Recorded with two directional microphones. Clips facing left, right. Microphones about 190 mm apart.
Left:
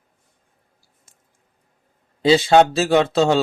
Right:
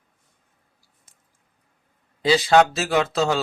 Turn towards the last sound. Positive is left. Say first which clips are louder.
# left 5 dB
turn(degrees=30)  # may be behind; listen again after turning